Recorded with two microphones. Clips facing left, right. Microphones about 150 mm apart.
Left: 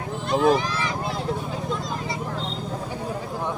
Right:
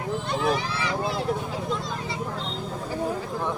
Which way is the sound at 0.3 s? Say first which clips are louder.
Left 7 dB; 45° left (ahead or behind).